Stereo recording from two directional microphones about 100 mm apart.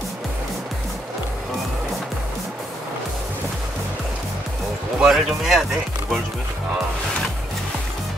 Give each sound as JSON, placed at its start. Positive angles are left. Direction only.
{"t": 5.0, "sound": "speech", "side_deg": 0}